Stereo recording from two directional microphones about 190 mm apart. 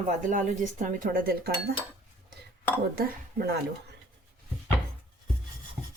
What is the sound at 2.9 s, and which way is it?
Speech, 55° right (ahead or behind).